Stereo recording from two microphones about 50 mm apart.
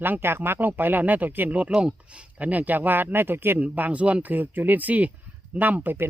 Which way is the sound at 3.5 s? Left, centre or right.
Right.